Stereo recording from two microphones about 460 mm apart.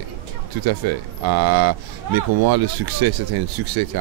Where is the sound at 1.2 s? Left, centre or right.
Right.